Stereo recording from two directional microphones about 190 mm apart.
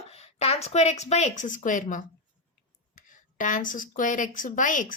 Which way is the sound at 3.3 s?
45° left (ahead or behind).